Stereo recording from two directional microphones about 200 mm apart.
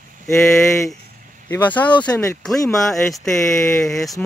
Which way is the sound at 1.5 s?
10° left (ahead or behind).